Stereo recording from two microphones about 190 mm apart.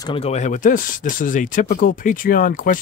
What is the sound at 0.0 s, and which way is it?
Speech, 30° left (ahead or behind).